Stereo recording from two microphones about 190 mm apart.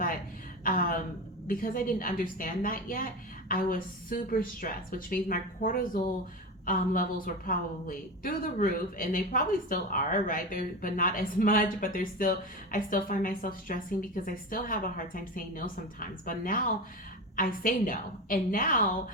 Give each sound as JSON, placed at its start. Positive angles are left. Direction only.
{"t": 0.6, "sound": "a woman's voice", "side_deg": 50}